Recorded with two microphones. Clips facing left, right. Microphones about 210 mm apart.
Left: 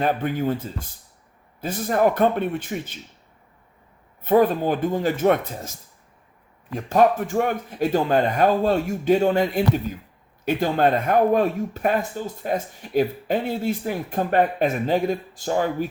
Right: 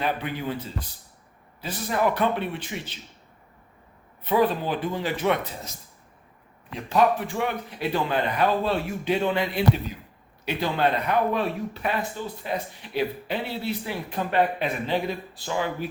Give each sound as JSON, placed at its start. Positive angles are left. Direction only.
{"t": 0.0, "sound": "speech", "side_deg": 45}
{"t": 4.2, "sound": "speech", "side_deg": 50}
{"t": 6.7, "sound": "speech", "side_deg": 45}